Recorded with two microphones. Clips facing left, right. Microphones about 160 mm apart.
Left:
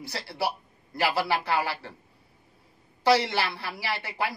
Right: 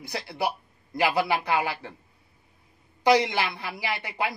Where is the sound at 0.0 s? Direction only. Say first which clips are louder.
Right 1 dB; 15° right (ahead or behind).